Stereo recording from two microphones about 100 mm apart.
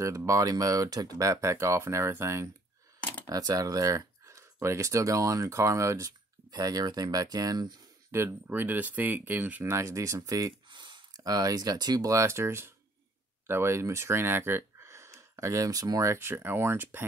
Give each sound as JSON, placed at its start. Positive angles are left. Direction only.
{"t": 0.0, "sound": "speech", "side_deg": -30}
{"t": 3.3, "sound": "speech", "side_deg": -40}
{"t": 6.5, "sound": "speech", "side_deg": -40}
{"t": 8.1, "sound": "speech", "side_deg": -25}
{"t": 10.7, "sound": "speech", "side_deg": -50}